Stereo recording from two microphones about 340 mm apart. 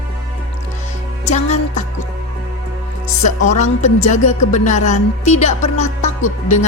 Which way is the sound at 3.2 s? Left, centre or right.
Left.